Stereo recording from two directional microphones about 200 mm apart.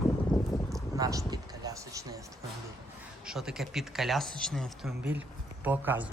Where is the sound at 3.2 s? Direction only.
5° right (ahead or behind).